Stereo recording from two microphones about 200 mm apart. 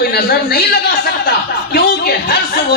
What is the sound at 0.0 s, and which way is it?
Speech, 50° left (ahead or behind).